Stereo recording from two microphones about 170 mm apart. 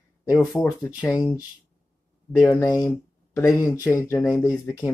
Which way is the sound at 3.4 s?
15° left (ahead or behind).